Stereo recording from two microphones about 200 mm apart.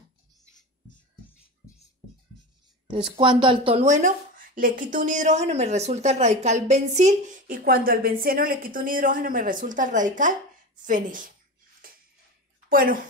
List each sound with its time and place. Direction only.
2.9 s speech: 25° right (ahead or behind); by 11.3 s 40° right (ahead or behind)
11.8 s a sound: 45° right (ahead or behind)
12.6 s a woman's voice: 45° right (ahead or behind)